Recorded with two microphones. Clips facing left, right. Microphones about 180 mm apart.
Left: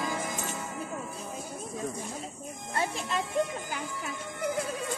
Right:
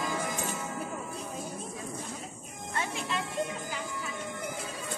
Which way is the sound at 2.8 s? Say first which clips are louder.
Left 3 dB; 40° left (ahead or behind).